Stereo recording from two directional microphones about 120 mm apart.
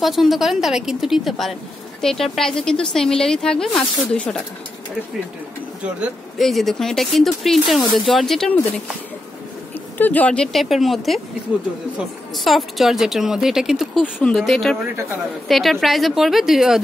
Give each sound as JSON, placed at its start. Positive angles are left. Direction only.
{"t": 0.0, "sound": "speech", "side_deg": 0}
{"t": 6.3, "sound": "speech", "side_deg": 0}
{"t": 9.9, "sound": "speech", "side_deg": 15}